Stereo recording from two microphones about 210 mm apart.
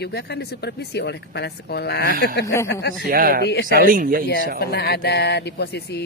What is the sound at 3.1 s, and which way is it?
Speech, 45° right (ahead or behind).